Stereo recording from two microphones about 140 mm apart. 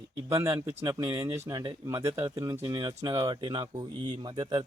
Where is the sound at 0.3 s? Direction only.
20° right (ahead or behind).